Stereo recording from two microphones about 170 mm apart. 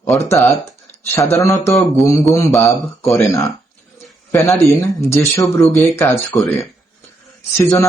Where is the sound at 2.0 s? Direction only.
Centre (ahead or behind).